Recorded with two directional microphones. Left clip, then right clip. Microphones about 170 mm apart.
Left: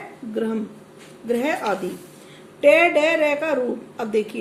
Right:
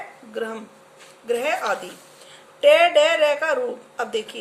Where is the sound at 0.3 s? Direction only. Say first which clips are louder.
Left 3 dB; 20° right (ahead or behind).